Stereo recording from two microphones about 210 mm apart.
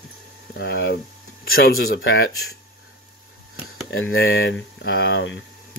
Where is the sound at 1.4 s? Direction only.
75° left (ahead or behind).